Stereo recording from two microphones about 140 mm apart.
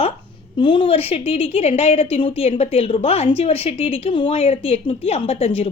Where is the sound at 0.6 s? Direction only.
40° left (ahead or behind).